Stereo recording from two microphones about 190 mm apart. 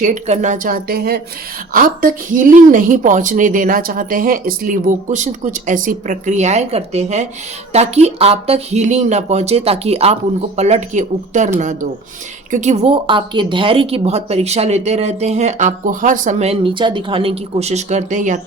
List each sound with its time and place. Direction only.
0.0 s a woman's voice: 40° right (ahead or behind)